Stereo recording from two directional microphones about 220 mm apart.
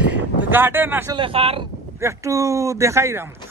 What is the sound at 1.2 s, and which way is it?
Speech, 25° right (ahead or behind).